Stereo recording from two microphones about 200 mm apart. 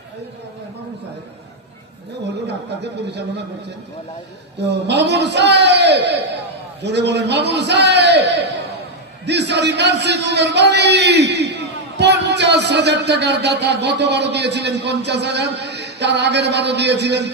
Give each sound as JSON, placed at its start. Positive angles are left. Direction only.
{"t": 2.4, "sound": "a man's voice", "side_deg": -60}
{"t": 4.6, "sound": "a man's voice", "side_deg": -60}